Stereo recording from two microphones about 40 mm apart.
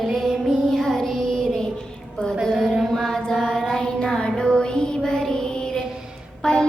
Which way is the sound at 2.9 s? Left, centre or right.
Centre.